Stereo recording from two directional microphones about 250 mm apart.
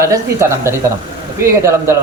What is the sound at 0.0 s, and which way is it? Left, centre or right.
A woman's voice, centre.